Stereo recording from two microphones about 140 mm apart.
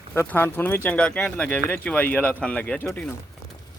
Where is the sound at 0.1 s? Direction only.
15° left (ahead or behind).